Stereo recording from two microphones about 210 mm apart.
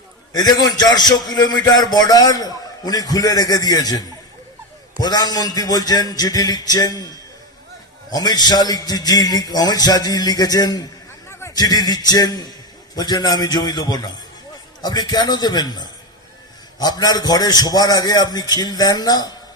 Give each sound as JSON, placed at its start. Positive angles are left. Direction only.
{"t": 0.3, "sound": "a man's voice", "side_deg": 20}
{"t": 8.1, "sound": "a man's voice", "side_deg": 20}